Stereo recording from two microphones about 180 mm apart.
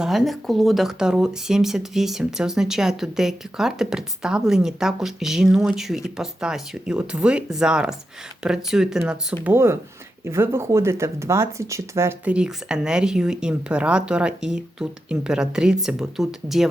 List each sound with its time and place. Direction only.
0.0 s speech: centre (ahead or behind)